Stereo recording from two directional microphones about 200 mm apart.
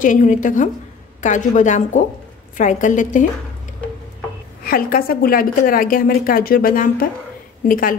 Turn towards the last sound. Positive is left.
turn(degrees=45)  # may be behind; listen again after turning